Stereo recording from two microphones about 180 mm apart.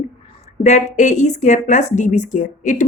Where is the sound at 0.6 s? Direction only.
40° left (ahead or behind).